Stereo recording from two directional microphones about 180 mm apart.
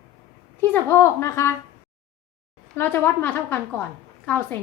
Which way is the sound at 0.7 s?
15° left (ahead or behind).